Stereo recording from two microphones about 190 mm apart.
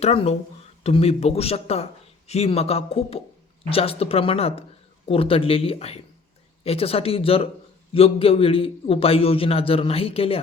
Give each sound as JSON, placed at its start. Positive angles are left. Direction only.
{"t": 0.0, "sound": "a man's voice", "side_deg": 35}